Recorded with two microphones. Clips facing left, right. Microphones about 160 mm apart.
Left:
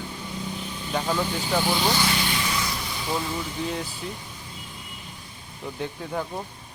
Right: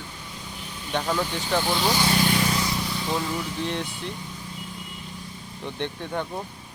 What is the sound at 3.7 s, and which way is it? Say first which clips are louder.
Speech: right 1 dB; 5° left (ahead or behind).